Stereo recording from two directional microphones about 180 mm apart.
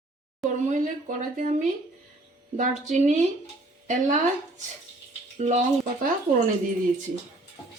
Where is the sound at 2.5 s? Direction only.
40° right (ahead or behind).